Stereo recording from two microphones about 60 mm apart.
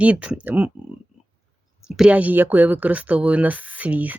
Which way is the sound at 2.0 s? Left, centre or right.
Right.